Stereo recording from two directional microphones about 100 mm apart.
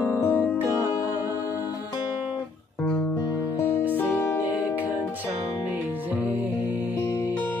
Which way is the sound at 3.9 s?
15° left (ahead or behind).